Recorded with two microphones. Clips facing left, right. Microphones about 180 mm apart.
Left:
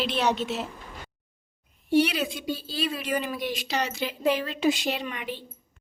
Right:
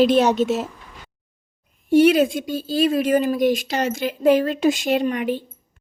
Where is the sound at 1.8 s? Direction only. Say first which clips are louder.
Right 9 dB; 50° right (ahead or behind).